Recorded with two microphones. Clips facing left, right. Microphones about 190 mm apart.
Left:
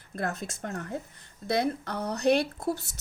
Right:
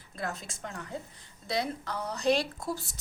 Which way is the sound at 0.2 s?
55° left (ahead or behind).